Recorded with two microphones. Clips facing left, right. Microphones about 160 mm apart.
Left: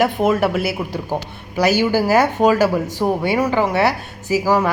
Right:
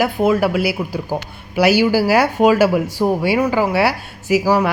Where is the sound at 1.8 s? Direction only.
10° right (ahead or behind).